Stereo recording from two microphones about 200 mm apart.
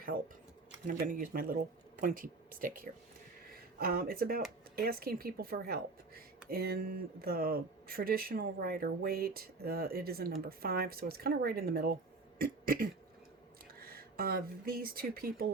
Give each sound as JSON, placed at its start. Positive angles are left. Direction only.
{"t": 0.9, "sound": "a woman's voice", "side_deg": -45}
{"t": 12.4, "sound": "a sound", "side_deg": -45}
{"t": 13.7, "sound": "speech", "side_deg": -50}